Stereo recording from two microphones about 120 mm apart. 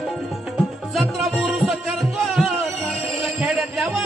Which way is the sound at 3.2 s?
5° right (ahead or behind).